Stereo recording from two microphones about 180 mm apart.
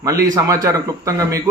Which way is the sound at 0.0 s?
20° right (ahead or behind).